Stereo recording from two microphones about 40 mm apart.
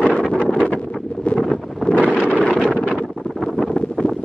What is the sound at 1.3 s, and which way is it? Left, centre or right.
Wind noise, centre.